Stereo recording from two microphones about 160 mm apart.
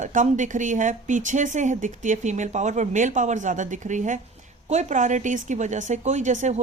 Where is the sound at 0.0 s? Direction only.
50° right (ahead or behind).